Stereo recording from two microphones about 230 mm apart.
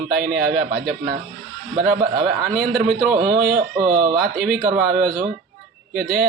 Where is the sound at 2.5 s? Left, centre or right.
Centre.